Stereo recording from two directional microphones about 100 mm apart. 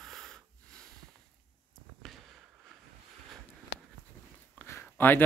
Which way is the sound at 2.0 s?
Centre (ahead or behind).